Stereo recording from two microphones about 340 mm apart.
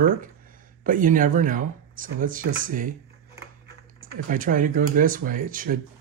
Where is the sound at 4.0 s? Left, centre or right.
Right.